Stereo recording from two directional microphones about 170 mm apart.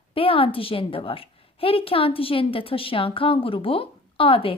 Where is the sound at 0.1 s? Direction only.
30° left (ahead or behind).